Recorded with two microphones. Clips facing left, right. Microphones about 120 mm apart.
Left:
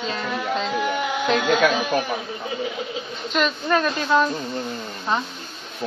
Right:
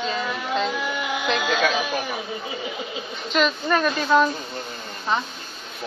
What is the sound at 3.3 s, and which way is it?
Speech, centre (ahead or behind).